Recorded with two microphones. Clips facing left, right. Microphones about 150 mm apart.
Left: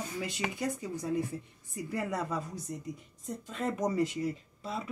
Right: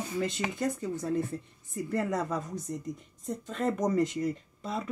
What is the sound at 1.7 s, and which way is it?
Speech, 45° right (ahead or behind).